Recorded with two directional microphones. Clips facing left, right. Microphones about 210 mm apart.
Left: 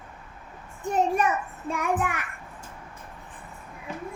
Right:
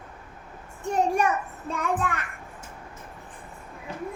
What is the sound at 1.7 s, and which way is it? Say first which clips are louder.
Child singing: even; 15° left (ahead or behind).